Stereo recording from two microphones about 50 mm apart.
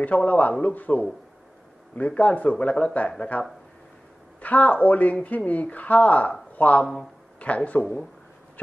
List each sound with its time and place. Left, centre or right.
0.0 s a man's voice: left